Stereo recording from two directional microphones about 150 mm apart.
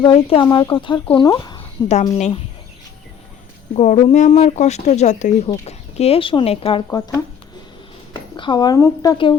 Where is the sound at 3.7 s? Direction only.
45° left (ahead or behind).